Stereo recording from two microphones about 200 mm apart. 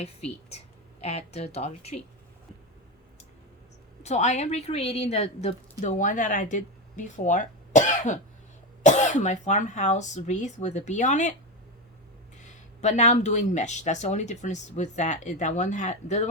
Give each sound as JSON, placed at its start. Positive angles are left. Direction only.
{"t": 0.0, "sound": "a woman's voice", "side_deg": 30}
{"t": 4.0, "sound": "a woman's voice", "side_deg": 35}
{"t": 12.4, "sound": "a woman's voice", "side_deg": 35}